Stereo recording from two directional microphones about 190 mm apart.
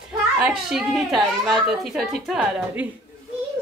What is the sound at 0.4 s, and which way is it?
A woman's voice, 5° right (ahead or behind).